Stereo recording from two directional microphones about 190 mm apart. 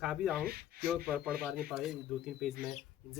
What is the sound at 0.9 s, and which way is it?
Speech, 5° right (ahead or behind).